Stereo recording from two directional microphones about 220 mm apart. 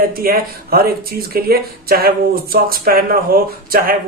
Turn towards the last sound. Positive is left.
turn(degrees=-40)  # may be behind; listen again after turning